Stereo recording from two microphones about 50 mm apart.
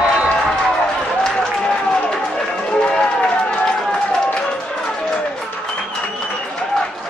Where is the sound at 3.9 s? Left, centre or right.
Left.